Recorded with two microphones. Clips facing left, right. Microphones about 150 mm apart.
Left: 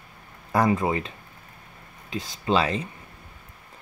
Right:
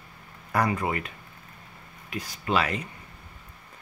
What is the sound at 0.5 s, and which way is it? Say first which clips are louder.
Speech: left 4 dB; 25° left (ahead or behind).